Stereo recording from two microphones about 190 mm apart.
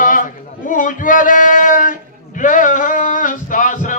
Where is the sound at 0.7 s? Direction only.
45° left (ahead or behind).